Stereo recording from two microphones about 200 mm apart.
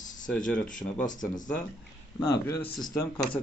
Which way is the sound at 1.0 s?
40° left (ahead or behind).